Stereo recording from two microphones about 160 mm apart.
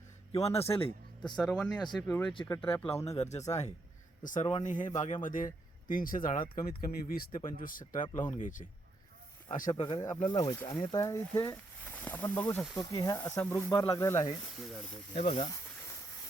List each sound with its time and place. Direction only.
0.4 s speech: 40° left (ahead or behind)
1.4 s speech: 5° left (ahead or behind)
3.2 s speech: 45° left (ahead or behind)
9.6 s speech: 25° left (ahead or behind)
12.7 s speech: 25° left (ahead or behind)
14.8 s speech: 35° left (ahead or behind)